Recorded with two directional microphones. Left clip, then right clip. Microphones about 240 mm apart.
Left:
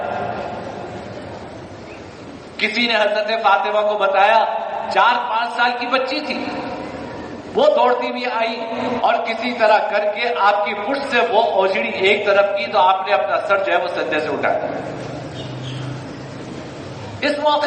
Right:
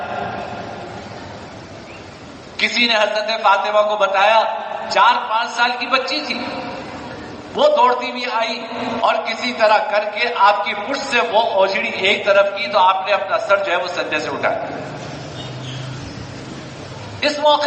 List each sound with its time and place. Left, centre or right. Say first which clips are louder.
2.6 s a man's voice: right 2 dB; right
7.5 s a man's voice: right 1 dB; right
17.2 s a man's voice: right 2 dB; right